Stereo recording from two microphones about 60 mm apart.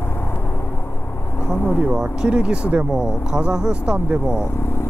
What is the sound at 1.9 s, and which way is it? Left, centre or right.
Speech, centre.